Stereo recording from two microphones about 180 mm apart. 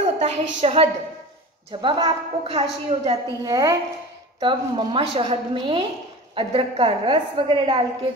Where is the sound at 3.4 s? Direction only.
20° right (ahead or behind).